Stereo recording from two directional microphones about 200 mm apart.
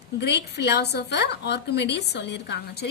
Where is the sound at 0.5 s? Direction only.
55° left (ahead or behind).